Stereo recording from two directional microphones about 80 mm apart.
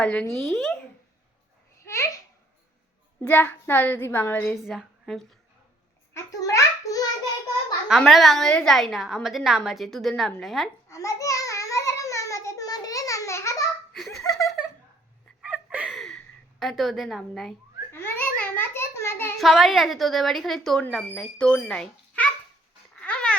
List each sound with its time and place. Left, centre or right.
0.0 s speech: centre
1.8 s a child's voice: left
3.2 s a woman's voice: left
4.5 s a woman's voice: centre
6.1 s a sound: left
7.9 s a woman's voice: centre
10.8 s a sound: left
13.9 s laughter: centre
15.4 s gasp: centre
15.9 s a sound: centre
17.9 s a sound: left
19.4 s a woman's voice: centre
23.0 s babbling: centre